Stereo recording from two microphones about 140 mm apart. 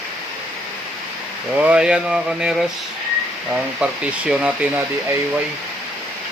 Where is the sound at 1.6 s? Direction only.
5° right (ahead or behind).